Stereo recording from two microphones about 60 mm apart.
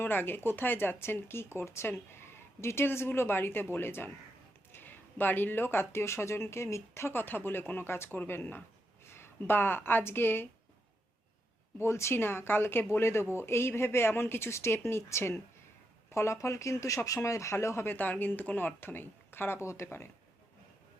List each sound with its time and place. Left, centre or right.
0.0 s speech: left
11.8 s speech: left
17.9 s speech: left